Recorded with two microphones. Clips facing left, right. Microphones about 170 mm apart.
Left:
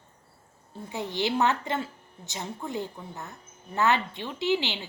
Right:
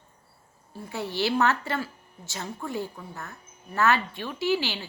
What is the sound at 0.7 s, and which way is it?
A woman's voice, 20° left (ahead or behind).